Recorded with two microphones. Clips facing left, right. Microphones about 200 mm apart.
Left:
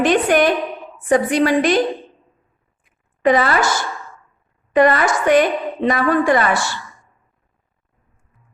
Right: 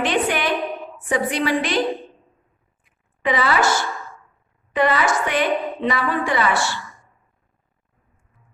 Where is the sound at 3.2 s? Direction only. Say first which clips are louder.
Left 5 dB; 45° left (ahead or behind).